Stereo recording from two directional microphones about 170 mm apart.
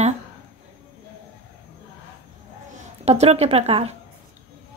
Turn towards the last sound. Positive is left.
turn(degrees=-40)  # may be behind; listen again after turning